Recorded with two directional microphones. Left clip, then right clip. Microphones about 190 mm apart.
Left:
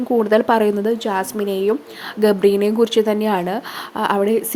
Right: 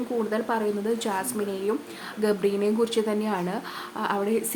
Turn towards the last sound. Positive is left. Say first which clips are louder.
# left 9 dB
turn(degrees=35)  # may be behind; listen again after turning